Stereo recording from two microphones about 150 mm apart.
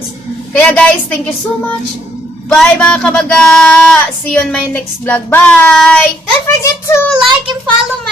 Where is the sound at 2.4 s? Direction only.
5° left (ahead or behind).